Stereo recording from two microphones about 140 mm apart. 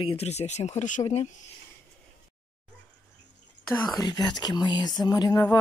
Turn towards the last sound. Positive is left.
turn(degrees=30)  # may be behind; listen again after turning